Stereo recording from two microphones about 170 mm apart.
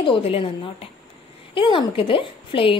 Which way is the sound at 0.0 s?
35° left (ahead or behind).